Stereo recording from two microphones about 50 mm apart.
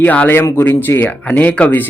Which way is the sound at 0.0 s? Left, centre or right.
Left.